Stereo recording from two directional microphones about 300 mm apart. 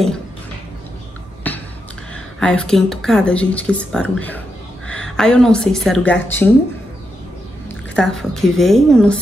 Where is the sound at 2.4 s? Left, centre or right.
Centre.